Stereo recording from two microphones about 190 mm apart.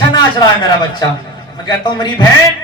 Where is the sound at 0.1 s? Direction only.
20° left (ahead or behind).